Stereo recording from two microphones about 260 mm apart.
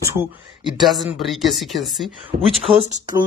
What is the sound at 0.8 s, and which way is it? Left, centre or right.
Speech, centre.